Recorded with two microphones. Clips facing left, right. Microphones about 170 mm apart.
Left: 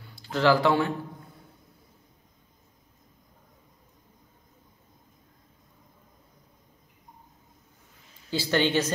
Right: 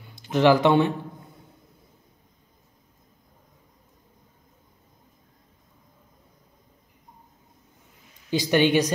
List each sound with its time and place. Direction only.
0.1 s speech: 20° right (ahead or behind)
8.3 s speech: 15° right (ahead or behind)